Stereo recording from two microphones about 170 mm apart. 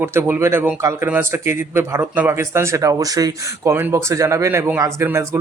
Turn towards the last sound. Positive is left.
turn(degrees=-15)  # may be behind; listen again after turning